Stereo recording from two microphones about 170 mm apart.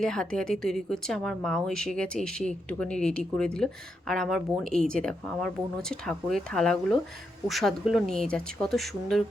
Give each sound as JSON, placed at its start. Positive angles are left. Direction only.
{"t": 0.0, "sound": "a woman's voice", "side_deg": 5}